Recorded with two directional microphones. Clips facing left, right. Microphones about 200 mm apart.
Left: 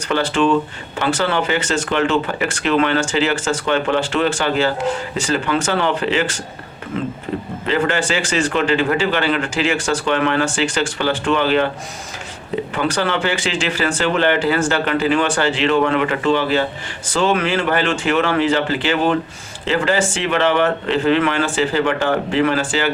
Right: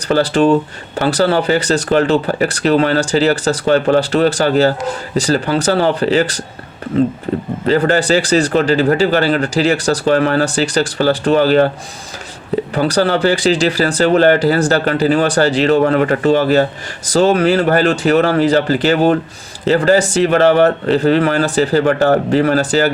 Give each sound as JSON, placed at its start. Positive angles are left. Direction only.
{"t": 0.1, "sound": "speech", "side_deg": -40}
{"t": 7.7, "sound": "speech", "side_deg": -40}
{"t": 12.7, "sound": "speech", "side_deg": -35}